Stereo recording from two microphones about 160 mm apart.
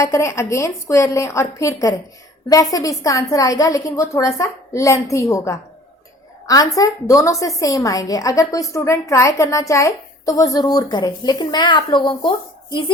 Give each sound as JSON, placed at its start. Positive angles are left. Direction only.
{"t": 0.0, "sound": "a woman's voice", "side_deg": 20}